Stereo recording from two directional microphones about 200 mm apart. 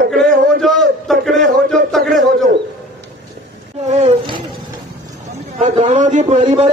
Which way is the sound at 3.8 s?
35° right (ahead or behind).